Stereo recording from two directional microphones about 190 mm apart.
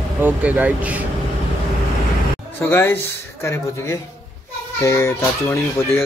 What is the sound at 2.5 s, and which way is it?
Speech, 10° left (ahead or behind).